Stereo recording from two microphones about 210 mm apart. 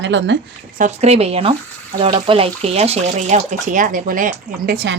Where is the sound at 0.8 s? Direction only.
30° right (ahead or behind).